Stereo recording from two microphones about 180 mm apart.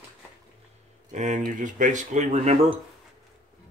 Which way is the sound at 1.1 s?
40° right (ahead or behind).